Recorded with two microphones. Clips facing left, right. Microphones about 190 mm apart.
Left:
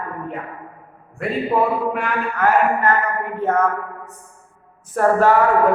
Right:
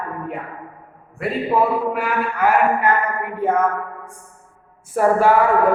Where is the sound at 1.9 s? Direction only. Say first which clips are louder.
Right 1 dB; 5° right (ahead or behind).